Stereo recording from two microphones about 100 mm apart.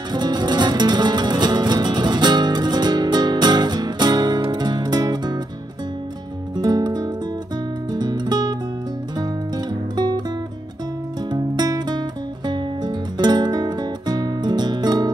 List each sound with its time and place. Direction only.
0.1 s music: 45° right (ahead or behind)
6.5 s music: 45° right (ahead or behind)
11.2 s music: 45° right (ahead or behind)